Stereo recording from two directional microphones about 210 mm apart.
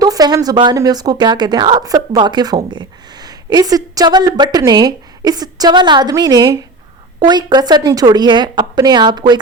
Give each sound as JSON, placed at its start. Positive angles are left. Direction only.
{"t": 0.0, "sound": "speech", "side_deg": -20}